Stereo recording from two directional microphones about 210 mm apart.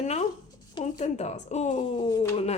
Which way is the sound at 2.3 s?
30° left (ahead or behind).